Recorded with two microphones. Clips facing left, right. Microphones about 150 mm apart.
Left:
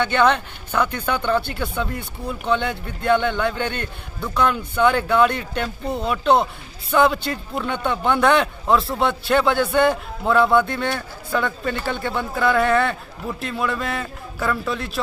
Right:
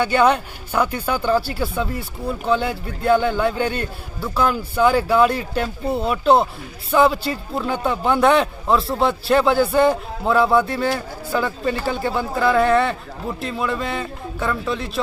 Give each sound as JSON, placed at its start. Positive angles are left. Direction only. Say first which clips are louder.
{"t": 0.0, "sound": "a man's voice", "louder": "right 2 dB", "side_deg": -10}